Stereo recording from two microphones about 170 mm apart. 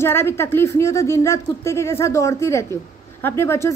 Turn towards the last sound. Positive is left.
turn(degrees=15)  # may be behind; listen again after turning